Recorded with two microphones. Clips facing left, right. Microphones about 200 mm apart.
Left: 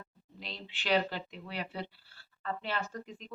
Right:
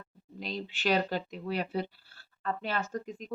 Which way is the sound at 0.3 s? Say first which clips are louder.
Right 8 dB; 40° right (ahead or behind).